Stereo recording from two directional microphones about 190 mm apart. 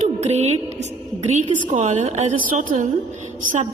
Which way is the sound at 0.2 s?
35° right (ahead or behind).